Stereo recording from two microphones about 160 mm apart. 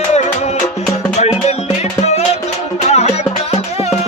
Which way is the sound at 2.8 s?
40° left (ahead or behind).